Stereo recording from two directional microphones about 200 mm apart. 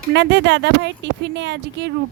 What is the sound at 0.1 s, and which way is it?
Speech, 60° right (ahead or behind).